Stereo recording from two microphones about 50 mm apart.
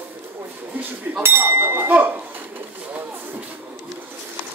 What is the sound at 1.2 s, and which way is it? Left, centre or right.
Speech, right.